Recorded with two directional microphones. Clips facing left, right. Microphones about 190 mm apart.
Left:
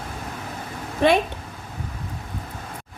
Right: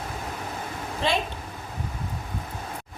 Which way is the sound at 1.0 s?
60° left (ahead or behind).